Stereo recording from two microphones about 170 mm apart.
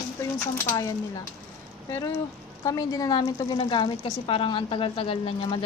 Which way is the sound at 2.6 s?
20° left (ahead or behind).